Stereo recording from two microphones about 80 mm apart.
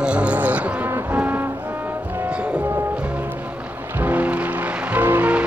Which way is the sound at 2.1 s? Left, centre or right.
Right.